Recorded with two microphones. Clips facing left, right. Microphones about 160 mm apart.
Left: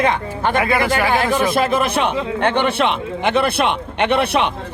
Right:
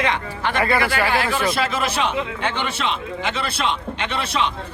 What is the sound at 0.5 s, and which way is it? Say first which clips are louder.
Speech: left 2 dB; 15° left (ahead or behind).